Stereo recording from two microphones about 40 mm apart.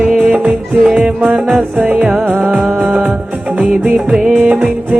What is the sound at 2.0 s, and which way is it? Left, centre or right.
Music, centre.